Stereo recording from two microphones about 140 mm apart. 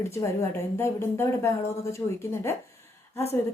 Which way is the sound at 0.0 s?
20° left (ahead or behind).